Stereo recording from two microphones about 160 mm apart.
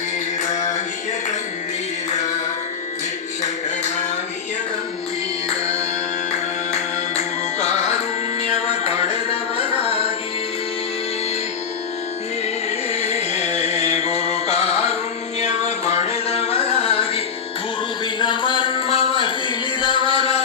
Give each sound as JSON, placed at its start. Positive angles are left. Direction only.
{"t": 0.5, "sound": "a sound", "side_deg": 45}
{"t": 6.3, "sound": "music", "side_deg": 45}
{"t": 12.9, "sound": "music", "side_deg": 40}